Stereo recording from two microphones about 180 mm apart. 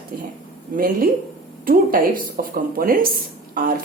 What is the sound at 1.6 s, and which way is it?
Speech, 55° right (ahead or behind).